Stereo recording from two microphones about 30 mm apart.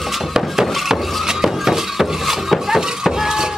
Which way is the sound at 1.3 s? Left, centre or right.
Centre.